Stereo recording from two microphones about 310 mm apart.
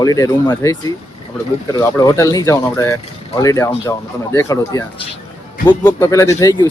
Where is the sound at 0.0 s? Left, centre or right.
Centre.